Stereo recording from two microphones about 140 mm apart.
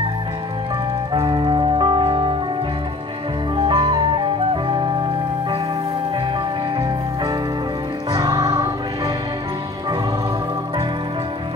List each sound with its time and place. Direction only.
1.1 s music: 35° right (ahead or behind)
3.5 s music: 35° right (ahead or behind)
8.1 s music: 25° right (ahead or behind)